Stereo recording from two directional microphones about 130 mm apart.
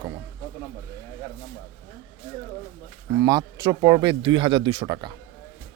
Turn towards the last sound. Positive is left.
turn(degrees=-35)  # may be behind; listen again after turning